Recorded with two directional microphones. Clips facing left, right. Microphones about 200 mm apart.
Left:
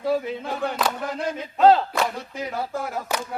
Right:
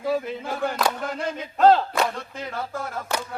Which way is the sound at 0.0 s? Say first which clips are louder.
Left 1 dB; centre (ahead or behind).